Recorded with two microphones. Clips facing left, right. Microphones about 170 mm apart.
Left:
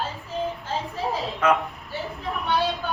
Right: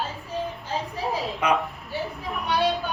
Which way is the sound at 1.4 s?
15° right (ahead or behind).